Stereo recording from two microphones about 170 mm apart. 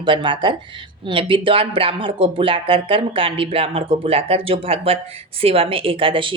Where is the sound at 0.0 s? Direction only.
30° right (ahead or behind).